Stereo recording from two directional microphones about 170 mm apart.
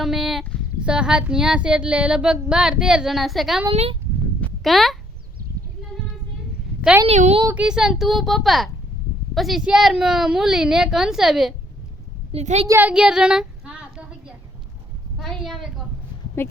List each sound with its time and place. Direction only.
0.0 s speech: centre (ahead or behind)
4.4 s a sound: centre (ahead or behind)
7.1 s a woman's voice: 40° right (ahead or behind)
7.4 s speech: 5° right (ahead or behind)
12.3 s a woman's voice: 40° right (ahead or behind)
12.6 s a sound: 10° right (ahead or behind)
16.4 s speech: 15° left (ahead or behind)